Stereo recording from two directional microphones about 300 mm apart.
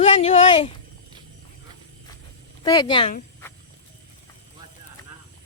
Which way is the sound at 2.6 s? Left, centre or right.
Centre.